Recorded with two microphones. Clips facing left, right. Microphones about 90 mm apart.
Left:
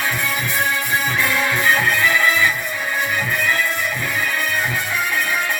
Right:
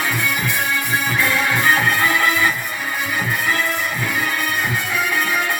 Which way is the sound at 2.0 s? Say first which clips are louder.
Even; 50° right (ahead or behind).